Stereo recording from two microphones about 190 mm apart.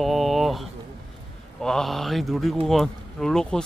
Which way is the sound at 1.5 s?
Centre (ahead or behind).